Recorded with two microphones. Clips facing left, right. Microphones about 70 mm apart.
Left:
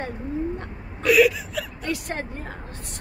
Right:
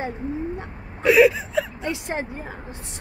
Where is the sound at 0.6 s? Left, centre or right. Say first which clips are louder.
Right 1 dB; right.